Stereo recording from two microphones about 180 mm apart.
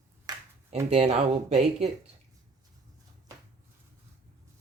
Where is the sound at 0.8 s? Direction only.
35° right (ahead or behind).